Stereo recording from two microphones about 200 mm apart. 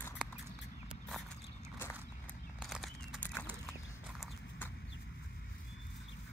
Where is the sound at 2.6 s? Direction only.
Centre (ahead or behind).